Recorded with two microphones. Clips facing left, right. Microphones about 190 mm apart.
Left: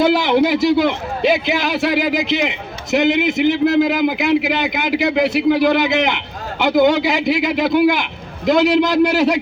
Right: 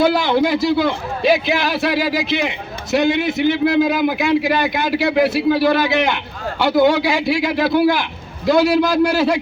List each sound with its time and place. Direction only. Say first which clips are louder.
0.0 s a man's voice: left 1 dB; 20° left (ahead or behind)